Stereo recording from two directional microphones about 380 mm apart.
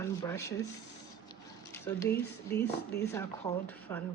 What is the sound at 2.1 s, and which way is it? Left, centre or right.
Speech, left.